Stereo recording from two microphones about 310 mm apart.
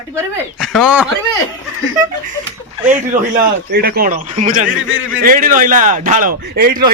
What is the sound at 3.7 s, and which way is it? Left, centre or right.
Speech, right.